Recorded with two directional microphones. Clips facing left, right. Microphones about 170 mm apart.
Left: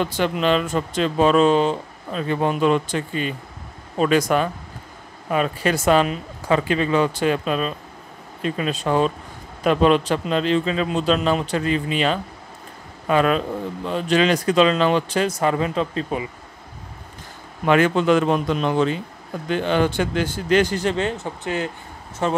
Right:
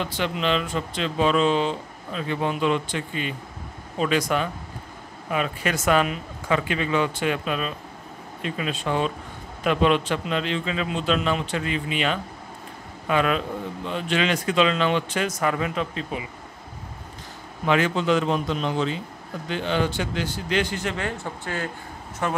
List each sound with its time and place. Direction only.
0.0 s a man's voice: 45° left (ahead or behind)
17.6 s a man's voice: 55° left (ahead or behind); by 22.4 s 25° left (ahead or behind)